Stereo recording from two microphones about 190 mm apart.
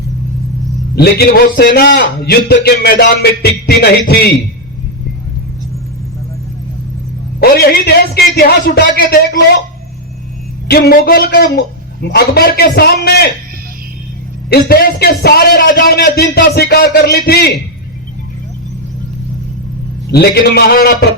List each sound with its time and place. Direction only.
0.9 s a man's voice: 55° left (ahead or behind)
7.3 s a man's voice: 55° left (ahead or behind)
10.7 s a man's voice: 55° left (ahead or behind)
14.5 s a man's voice: 50° left (ahead or behind)
20.1 s a man's voice: 55° left (ahead or behind)